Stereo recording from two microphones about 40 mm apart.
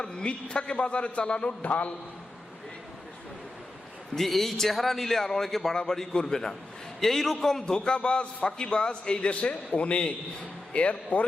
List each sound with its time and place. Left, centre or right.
0.0 s a man's voice: left
1.6 s speech: left
4.1 s a man's voice: centre
7.0 s a man's voice: centre
7.6 s a man's voice: left